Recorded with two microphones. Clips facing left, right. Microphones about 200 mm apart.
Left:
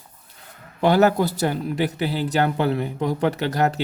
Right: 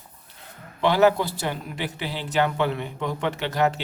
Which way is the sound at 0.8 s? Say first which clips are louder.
Left 2 dB; 45° left (ahead or behind).